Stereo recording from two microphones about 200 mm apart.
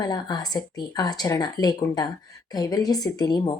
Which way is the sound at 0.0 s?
20° left (ahead or behind).